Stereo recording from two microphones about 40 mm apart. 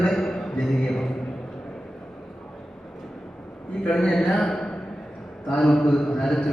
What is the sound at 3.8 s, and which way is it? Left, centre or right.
A man's voice, left.